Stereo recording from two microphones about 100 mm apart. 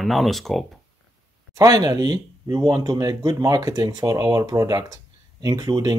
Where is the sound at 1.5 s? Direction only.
35° right (ahead or behind).